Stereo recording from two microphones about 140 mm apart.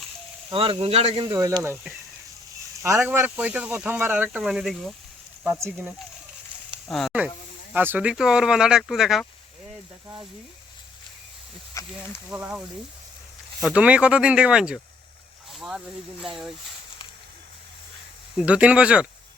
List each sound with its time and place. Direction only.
0.5 s speech: 40° right (ahead or behind)
1.3 s speech: 20° right (ahead or behind)
3.0 s speech: 10° right (ahead or behind)
5.4 s speech: 15° right (ahead or behind)
6.8 s speech: centre (ahead or behind)
7.7 s speech: 10° right (ahead or behind)
11.8 s speech: 20° left (ahead or behind)
12.3 s speech: 10° right (ahead or behind)
18.3 s speech: 10° right (ahead or behind)